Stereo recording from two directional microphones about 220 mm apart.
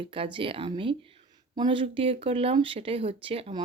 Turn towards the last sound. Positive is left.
turn(degrees=-25)  # may be behind; listen again after turning